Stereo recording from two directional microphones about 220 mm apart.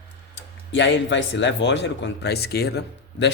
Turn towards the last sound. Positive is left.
turn(degrees=50)  # may be behind; listen again after turning